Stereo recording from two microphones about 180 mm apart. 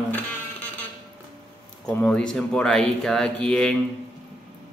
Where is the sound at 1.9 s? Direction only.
5° left (ahead or behind).